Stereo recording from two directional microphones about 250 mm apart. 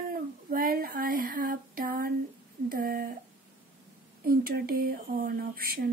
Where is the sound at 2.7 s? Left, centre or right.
Right.